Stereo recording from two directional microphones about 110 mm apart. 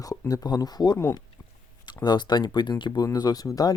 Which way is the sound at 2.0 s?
40° left (ahead or behind).